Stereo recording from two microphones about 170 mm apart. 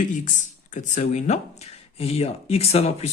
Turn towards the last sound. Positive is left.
turn(degrees=40)  # may be behind; listen again after turning